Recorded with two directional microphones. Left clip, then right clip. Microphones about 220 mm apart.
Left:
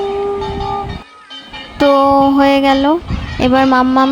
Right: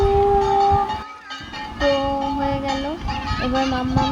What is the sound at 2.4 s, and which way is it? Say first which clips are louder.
Speech: left 12 dB; 45° left (ahead or behind).